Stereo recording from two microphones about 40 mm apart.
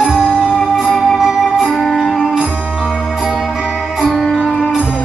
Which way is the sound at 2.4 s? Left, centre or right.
Right.